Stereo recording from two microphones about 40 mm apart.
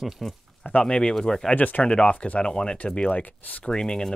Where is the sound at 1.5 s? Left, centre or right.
Left.